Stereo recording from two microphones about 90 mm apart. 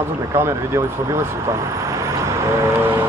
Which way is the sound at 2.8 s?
25° right (ahead or behind).